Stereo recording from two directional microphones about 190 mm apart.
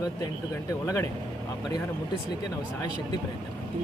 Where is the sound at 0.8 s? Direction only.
15° left (ahead or behind).